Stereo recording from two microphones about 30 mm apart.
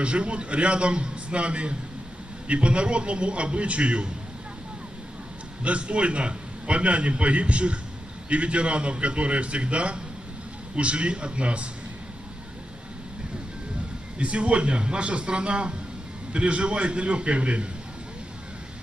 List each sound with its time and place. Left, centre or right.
0.0 s a man's voice: right
5.6 s a man's voice: right
14.2 s a man's voice: right